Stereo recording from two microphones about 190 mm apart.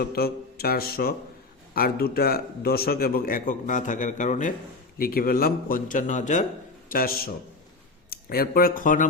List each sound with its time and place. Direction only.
0.0 s a man's voice: 55° left (ahead or behind)